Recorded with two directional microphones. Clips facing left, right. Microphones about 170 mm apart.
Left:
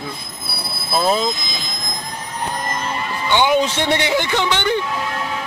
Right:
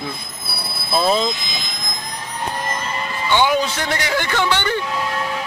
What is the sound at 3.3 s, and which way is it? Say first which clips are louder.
Speech: left 1 dB; 15° left (ahead or behind).